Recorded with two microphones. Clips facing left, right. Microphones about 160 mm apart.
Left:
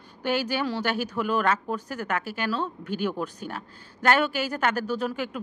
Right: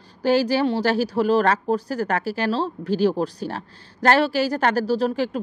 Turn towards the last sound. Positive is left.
turn(degrees=-35)  # may be behind; listen again after turning